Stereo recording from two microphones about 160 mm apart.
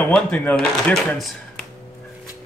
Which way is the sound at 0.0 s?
10° left (ahead or behind).